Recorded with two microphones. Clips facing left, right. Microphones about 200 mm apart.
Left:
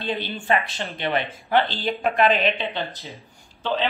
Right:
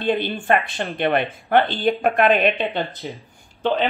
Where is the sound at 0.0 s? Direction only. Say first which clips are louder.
Right 6 dB; 60° right (ahead or behind).